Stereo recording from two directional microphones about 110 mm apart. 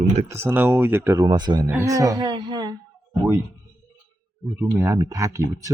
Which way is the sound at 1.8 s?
30° right (ahead or behind).